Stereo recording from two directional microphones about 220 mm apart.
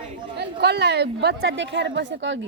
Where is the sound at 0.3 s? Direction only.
50° right (ahead or behind).